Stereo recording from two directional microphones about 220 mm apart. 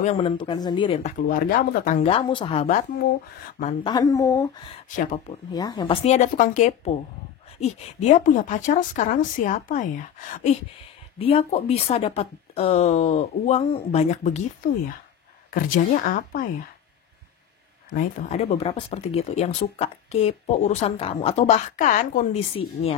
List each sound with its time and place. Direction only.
0.0 s speech: 25° left (ahead or behind)
1.3 s a woman's voice: 40° left (ahead or behind)
3.8 s speech: 15° left (ahead or behind)
4.8 s a woman's voice: 35° left (ahead or behind)
5.5 s speech: 20° left (ahead or behind)
6.0 s a woman's voice: 35° left (ahead or behind)
15.5 s a woman's voice: 40° left (ahead or behind)
17.9 s speech: 30° left (ahead or behind)